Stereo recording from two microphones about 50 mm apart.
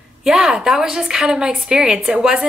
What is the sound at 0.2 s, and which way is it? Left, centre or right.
A woman's voice, centre.